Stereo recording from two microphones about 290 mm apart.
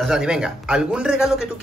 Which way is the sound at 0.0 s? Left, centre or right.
Centre.